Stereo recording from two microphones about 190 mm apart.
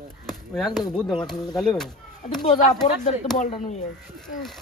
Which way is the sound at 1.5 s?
Centre (ahead or behind).